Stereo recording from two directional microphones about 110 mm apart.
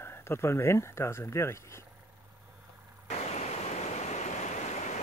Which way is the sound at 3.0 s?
90° left.